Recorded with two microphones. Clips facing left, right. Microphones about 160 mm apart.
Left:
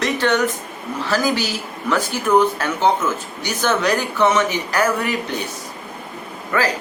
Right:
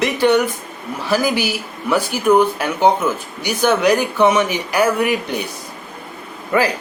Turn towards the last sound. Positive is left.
turn(degrees=-15)  # may be behind; listen again after turning